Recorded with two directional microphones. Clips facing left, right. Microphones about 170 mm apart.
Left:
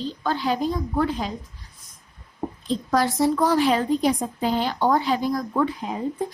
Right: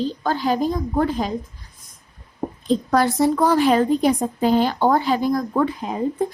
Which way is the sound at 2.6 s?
55° right (ahead or behind).